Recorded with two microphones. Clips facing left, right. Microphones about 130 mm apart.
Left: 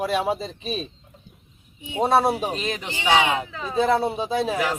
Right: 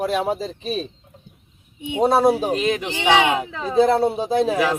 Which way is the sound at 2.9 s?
70° right (ahead or behind).